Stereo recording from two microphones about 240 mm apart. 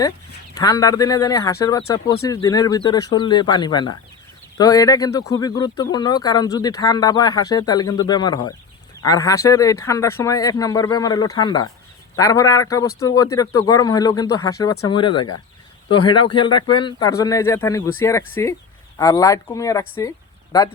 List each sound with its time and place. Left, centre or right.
0.5 s speech: centre
15.1 s speech: left
15.9 s speech: centre
20.0 s a sound: centre